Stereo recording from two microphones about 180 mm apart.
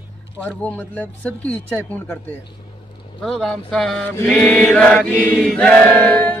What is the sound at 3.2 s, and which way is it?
Speech, centre (ahead or behind).